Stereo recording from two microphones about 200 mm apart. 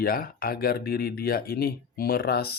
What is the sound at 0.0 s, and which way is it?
Speech, 45° left (ahead or behind).